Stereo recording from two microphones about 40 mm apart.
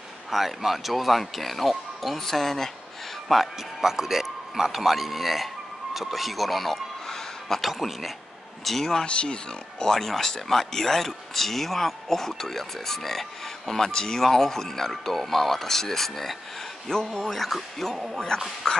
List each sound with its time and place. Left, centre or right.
0.3 s speech: centre
3.3 s speech: centre
7.1 s a sound: centre
7.6 s speech: centre
9.0 s speech: left
9.9 s speech: centre
17.9 s speech: centre
18.6 s speech: centre